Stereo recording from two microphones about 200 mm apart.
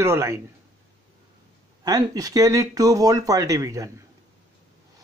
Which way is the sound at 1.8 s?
20° right (ahead or behind).